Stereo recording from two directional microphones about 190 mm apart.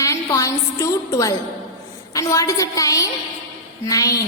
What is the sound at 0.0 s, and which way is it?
A woman's voice, 15° left (ahead or behind).